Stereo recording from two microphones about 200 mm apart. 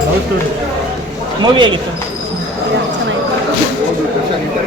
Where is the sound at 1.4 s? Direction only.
25° right (ahead or behind).